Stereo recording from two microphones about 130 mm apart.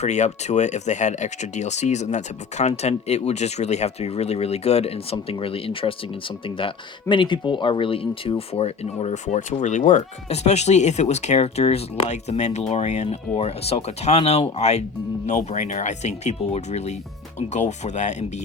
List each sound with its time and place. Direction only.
0.0 s speech: 60° left (ahead or behind)
13.3 s speech: 50° left (ahead or behind)